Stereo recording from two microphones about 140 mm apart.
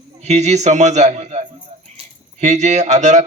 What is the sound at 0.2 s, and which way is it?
A man's voice, 55° right (ahead or behind).